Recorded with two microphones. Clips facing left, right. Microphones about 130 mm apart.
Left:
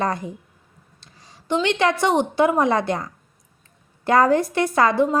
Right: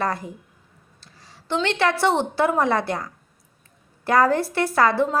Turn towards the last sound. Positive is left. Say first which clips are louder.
# left 1 dB
turn(degrees=15)  # may be behind; listen again after turning